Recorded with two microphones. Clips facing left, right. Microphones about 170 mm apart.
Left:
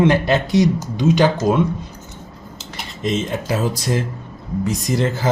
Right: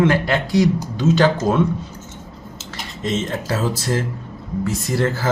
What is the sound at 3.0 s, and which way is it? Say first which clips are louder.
Speech: left 1 dB; 15° left (ahead or behind).